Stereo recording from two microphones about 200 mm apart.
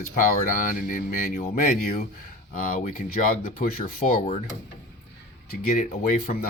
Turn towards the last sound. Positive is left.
turn(degrees=40)  # may be behind; listen again after turning